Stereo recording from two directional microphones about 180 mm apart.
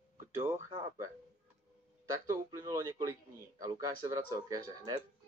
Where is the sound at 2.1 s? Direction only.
15° right (ahead or behind).